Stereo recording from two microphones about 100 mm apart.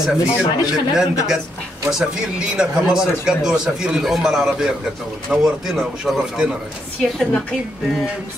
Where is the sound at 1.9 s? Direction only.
10° right (ahead or behind).